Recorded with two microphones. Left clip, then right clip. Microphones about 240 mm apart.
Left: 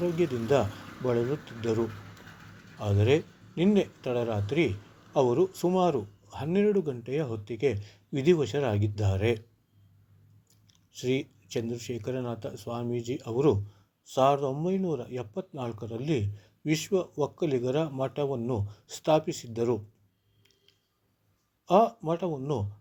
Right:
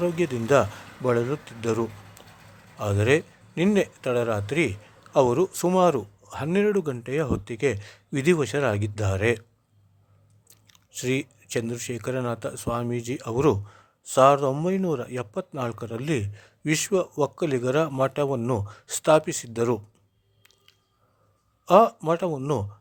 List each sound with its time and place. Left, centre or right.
0.0 s speech: right
10.5 s speech: right
21.6 s speech: right